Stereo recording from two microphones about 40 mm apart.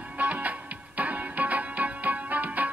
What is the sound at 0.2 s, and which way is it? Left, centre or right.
Music, right.